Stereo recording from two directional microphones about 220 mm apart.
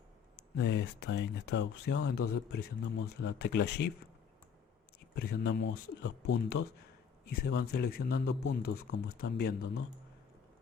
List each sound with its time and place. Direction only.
0.6 s speech: 50° left (ahead or behind)
5.1 s speech: 45° left (ahead or behind)